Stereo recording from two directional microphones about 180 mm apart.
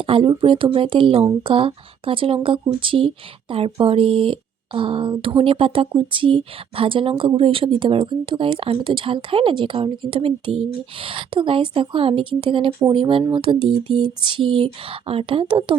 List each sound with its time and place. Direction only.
0.0 s speech: 30° right (ahead or behind)